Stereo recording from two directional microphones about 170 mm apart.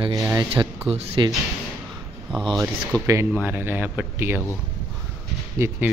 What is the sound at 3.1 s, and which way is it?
Speech, 15° right (ahead or behind).